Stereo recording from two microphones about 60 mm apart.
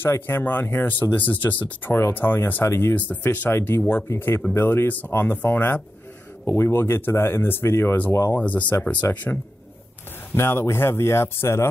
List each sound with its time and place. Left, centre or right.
0.0 s speech: left
3.0 s speech: left
3.4 s speech: left
6.4 s speech: left
8.4 s speech: left
10.3 s speech: left